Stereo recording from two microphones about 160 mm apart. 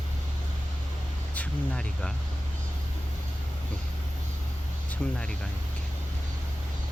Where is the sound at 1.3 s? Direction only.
5° left (ahead or behind).